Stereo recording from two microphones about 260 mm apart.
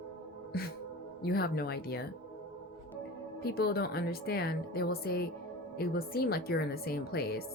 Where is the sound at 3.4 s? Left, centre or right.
Left.